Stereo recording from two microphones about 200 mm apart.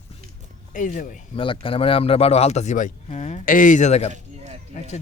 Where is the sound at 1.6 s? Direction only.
25° left (ahead or behind).